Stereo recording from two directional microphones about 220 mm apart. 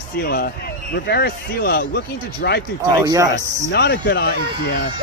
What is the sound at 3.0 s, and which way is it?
Speech, 15° right (ahead or behind).